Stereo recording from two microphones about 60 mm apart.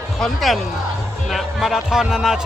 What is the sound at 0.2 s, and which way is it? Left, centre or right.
A man's voice, centre.